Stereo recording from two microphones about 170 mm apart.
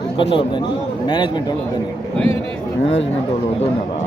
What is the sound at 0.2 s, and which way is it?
Speech, 30° left (ahead or behind).